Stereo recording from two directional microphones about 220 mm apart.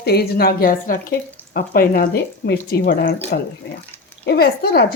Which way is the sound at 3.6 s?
55° left (ahead or behind).